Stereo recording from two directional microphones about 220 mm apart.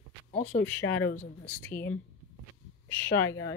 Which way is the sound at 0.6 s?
10° left (ahead or behind).